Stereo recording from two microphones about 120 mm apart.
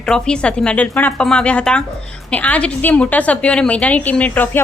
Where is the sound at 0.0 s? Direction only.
5° left (ahead or behind).